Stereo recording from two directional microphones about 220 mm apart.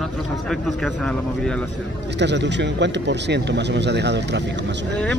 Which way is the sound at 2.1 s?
50° right (ahead or behind).